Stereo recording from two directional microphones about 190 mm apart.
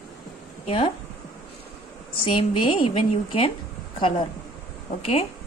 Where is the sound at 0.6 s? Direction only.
30° left (ahead or behind).